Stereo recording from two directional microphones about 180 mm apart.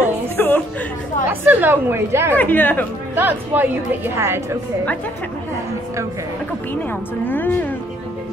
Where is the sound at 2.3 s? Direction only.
10° left (ahead or behind).